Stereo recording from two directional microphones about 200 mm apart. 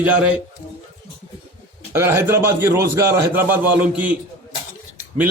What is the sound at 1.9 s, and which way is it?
A man's voice, 15° right (ahead or behind).